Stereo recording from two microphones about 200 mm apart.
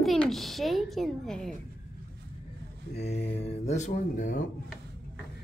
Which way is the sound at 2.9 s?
35° left (ahead or behind).